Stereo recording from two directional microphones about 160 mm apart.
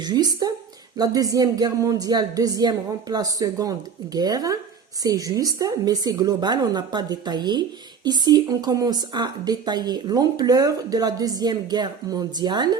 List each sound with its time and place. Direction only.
0.0 s a woman's voice: 25° right (ahead or behind)